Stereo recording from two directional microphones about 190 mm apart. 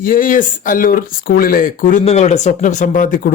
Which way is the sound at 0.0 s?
45° left (ahead or behind).